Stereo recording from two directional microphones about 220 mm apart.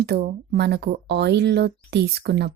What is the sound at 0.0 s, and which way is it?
Speech, 45° right (ahead or behind).